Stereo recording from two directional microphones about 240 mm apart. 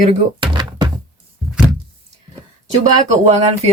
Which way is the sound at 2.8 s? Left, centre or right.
Right.